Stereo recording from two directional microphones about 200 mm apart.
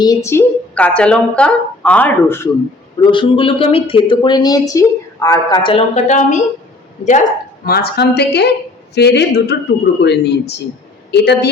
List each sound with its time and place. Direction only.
0.0 s a woman's voice: 15° left (ahead or behind)
3.0 s a woman's voice: 25° left (ahead or behind); by 11.4 s 55° left (ahead or behind)